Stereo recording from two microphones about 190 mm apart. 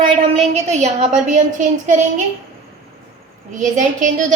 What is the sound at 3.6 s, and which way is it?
Speech, 40° right (ahead or behind).